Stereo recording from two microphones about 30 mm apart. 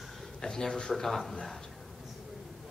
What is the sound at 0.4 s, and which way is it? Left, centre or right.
Speech, centre.